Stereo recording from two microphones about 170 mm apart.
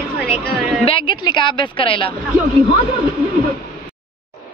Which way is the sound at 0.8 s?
30° left (ahead or behind).